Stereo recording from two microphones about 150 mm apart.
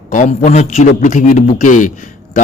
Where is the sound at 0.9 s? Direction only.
65° left (ahead or behind).